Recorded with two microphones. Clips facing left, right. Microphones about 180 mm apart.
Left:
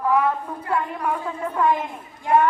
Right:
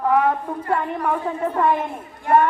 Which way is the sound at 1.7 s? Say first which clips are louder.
Right 3 dB; 55° right (ahead or behind).